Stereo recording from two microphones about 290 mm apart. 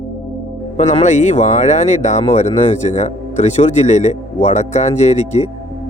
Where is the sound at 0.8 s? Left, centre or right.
Left.